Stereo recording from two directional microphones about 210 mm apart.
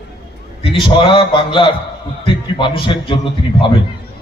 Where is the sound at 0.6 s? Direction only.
25° left (ahead or behind).